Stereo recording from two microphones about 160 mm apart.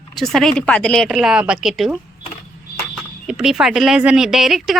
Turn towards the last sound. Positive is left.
turn(degrees=0)  # may be behind; listen again after turning